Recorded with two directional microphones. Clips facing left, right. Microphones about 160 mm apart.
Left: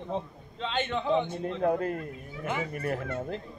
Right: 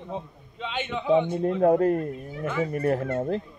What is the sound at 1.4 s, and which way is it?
Speech, 40° right (ahead or behind).